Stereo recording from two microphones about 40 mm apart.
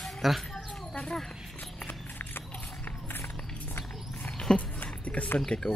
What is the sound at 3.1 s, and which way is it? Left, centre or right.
Music, left.